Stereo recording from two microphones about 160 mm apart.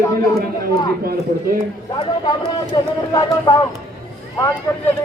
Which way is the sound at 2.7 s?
25° left (ahead or behind).